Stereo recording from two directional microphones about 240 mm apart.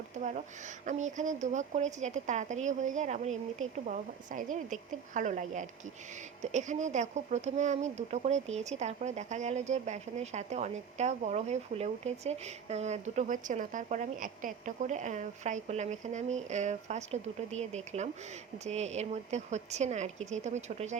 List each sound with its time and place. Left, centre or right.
0.2 s a woman's voice: right